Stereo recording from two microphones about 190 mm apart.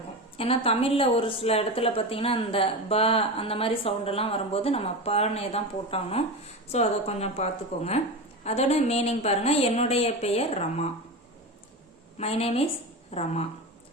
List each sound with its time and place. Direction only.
0.3 s a woman's voice: 30° left (ahead or behind)
12.1 s a woman's voice: 30° left (ahead or behind)